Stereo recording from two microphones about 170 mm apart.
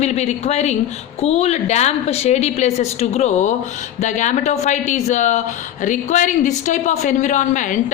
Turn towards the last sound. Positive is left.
turn(degrees=50)  # may be behind; listen again after turning